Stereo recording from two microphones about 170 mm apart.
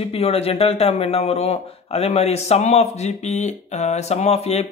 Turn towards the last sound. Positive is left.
turn(degrees=40)  # may be behind; listen again after turning